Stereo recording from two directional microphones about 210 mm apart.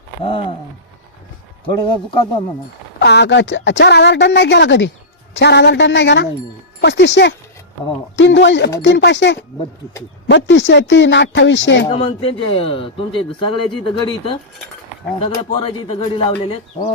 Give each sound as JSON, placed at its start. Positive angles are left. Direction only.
{"t": 0.3, "sound": "speech", "side_deg": 25}
{"t": 1.6, "sound": "speech", "side_deg": 25}
{"t": 3.0, "sound": "a woman's voice", "side_deg": 55}
{"t": 11.9, "sound": "speech", "side_deg": 25}
{"t": 15.2, "sound": "speech", "side_deg": 25}